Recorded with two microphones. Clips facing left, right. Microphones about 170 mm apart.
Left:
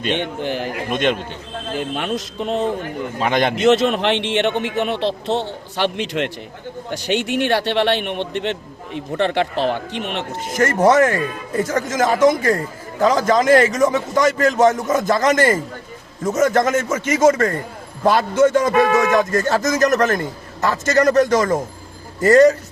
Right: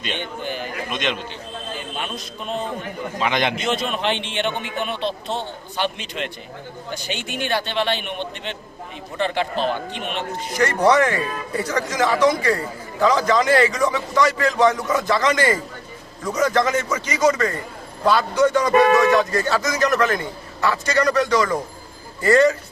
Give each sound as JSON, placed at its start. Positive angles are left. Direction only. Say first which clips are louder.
{"t": 0.1, "sound": "a man's voice", "louder": "left 6 dB", "side_deg": 75}
{"t": 0.9, "sound": "speech", "louder": "left 7 dB", "side_deg": 50}
{"t": 1.7, "sound": "a man's voice", "louder": "left 9 dB", "side_deg": 75}
{"t": 3.2, "sound": "speech", "louder": "left 3 dB", "side_deg": 45}
{"t": 3.6, "sound": "a man's voice", "louder": "left 9 dB", "side_deg": 75}
{"t": 10.6, "sound": "a man's voice", "louder": "left 3 dB", "side_deg": 45}